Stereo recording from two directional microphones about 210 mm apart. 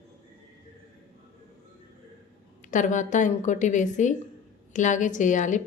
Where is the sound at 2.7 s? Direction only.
35° left (ahead or behind).